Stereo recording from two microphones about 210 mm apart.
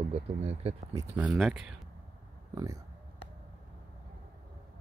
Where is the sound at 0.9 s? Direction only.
15° right (ahead or behind).